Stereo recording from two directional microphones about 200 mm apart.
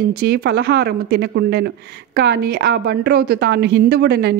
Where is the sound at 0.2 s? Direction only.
55° right (ahead or behind).